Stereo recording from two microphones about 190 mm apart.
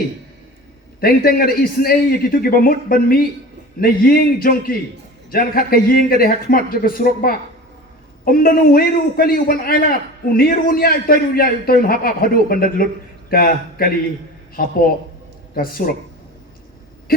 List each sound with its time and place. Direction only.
1.0 s a man's voice: 50° left (ahead or behind)
17.1 s a man's voice: 50° left (ahead or behind)